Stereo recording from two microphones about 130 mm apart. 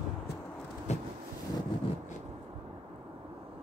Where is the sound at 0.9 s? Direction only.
60° left (ahead or behind).